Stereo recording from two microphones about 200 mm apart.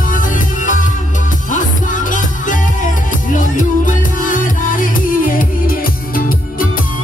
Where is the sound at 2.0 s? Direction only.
40° left (ahead or behind).